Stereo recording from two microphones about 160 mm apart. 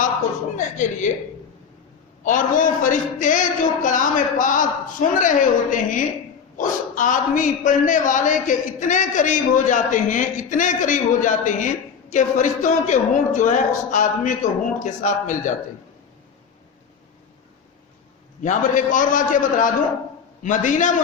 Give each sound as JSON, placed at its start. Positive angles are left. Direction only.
{"t": 0.5, "sound": "a man's voice", "side_deg": 50}
{"t": 2.2, "sound": "a man's voice", "side_deg": 55}
{"t": 18.4, "sound": "a man's voice", "side_deg": 55}